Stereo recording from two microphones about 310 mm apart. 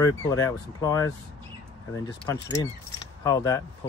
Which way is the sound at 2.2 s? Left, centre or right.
Centre.